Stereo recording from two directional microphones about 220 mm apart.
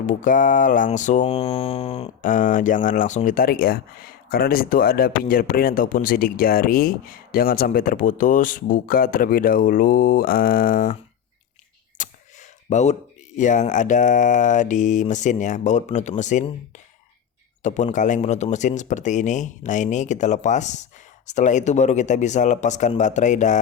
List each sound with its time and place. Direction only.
0.0 s music: 35° left (ahead or behind)
11.9 s speech: 30° left (ahead or behind)
17.6 s music: 35° left (ahead or behind)